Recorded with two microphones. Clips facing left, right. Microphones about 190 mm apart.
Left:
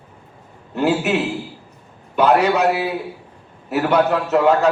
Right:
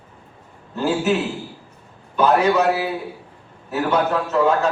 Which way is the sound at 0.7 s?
70° left (ahead or behind).